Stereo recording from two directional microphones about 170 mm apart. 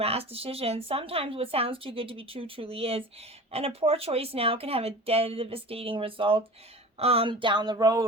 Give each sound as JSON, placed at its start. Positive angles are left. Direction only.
{"t": 0.0, "sound": "speech", "side_deg": -35}